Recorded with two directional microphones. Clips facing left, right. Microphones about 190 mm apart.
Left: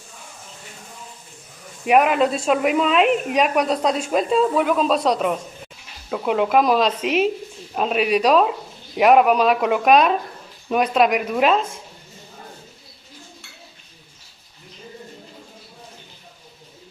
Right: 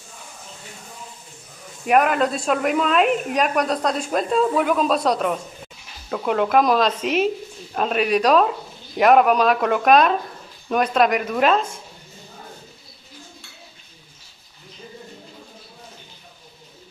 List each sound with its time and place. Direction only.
1.9 s speech: 5° left (ahead or behind)